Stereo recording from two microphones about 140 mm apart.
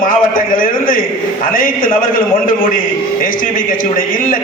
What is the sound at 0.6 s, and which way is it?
A man's voice, 85° left.